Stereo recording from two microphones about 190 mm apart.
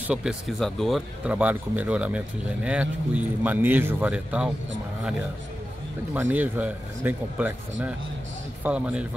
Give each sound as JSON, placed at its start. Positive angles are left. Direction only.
{"t": 0.1, "sound": "speech", "side_deg": -5}
{"t": 6.1, "sound": "speech", "side_deg": -10}
{"t": 8.6, "sound": "speech", "side_deg": -5}